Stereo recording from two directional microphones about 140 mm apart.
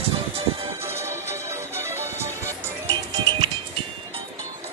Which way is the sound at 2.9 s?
30° right (ahead or behind).